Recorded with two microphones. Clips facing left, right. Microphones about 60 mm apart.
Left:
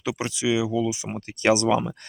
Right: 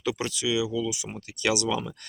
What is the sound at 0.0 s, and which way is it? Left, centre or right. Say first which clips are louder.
Speech: left 2 dB; centre.